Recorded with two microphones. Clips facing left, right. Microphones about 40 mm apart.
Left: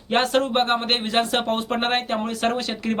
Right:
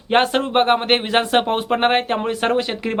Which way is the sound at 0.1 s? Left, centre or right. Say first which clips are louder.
Right 3 dB; right.